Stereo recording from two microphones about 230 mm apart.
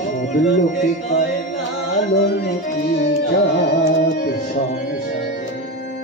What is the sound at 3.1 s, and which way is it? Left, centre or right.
Music, left.